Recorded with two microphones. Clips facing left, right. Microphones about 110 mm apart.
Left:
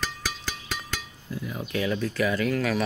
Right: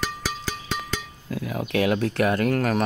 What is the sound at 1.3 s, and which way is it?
Speech, 90° right.